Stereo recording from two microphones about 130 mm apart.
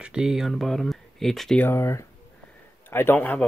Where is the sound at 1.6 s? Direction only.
20° left (ahead or behind).